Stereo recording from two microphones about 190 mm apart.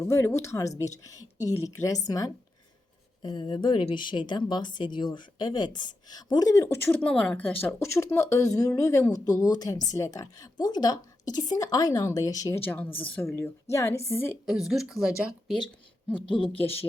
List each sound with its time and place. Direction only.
0.0 s a woman's voice: 15° left (ahead or behind)
14.4 s speech: centre (ahead or behind)